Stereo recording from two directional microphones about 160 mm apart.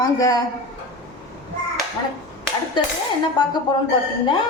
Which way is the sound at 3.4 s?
30° left (ahead or behind).